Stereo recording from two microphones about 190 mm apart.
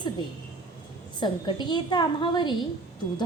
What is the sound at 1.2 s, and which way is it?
A woman's voice, 25° left (ahead or behind).